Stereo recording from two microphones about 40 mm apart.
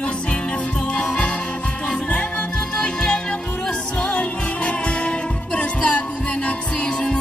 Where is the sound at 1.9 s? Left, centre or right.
Left.